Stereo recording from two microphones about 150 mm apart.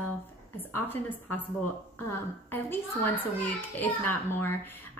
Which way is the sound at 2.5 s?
15° left (ahead or behind).